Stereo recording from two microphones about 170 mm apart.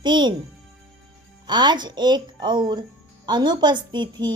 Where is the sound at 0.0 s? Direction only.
25° right (ahead or behind).